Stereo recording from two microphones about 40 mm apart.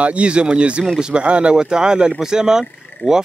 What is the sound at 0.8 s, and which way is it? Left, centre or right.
Speech, centre.